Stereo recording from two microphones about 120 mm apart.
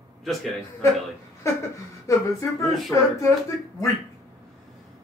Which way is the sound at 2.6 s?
Centre (ahead or behind).